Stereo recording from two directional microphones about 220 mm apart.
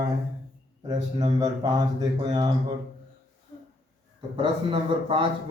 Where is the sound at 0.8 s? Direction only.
20° right (ahead or behind).